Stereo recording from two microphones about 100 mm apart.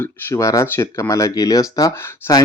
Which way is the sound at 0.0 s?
30° left (ahead or behind).